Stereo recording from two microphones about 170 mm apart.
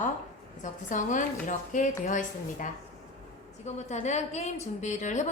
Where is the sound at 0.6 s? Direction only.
50° left (ahead or behind).